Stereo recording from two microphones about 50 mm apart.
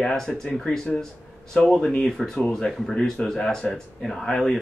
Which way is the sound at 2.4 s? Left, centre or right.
Centre.